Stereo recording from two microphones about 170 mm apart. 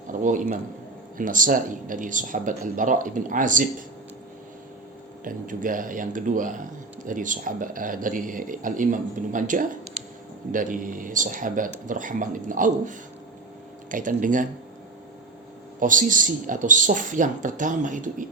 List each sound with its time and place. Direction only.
0.1 s speech: 50° right (ahead or behind)
5.2 s speech: 50° right (ahead or behind)
15.8 s speech: 50° right (ahead or behind)